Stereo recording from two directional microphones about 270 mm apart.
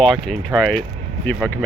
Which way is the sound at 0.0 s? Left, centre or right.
Centre.